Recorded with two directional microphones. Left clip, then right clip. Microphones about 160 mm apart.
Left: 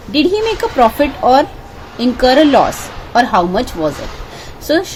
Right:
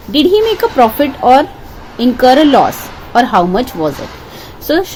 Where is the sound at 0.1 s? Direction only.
35° right (ahead or behind).